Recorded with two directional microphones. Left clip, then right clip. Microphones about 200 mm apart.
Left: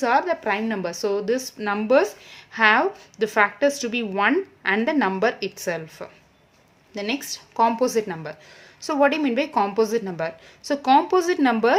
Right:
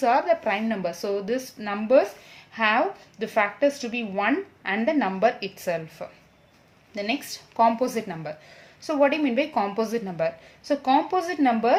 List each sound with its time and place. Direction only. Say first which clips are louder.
0.0 s a woman's voice: even; 25° left (ahead or behind)